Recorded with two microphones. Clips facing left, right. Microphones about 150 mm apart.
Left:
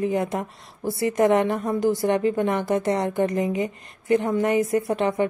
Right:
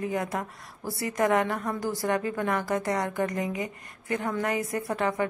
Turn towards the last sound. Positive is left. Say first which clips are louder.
# left 6 dB
turn(degrees=20)  # may be behind; listen again after turning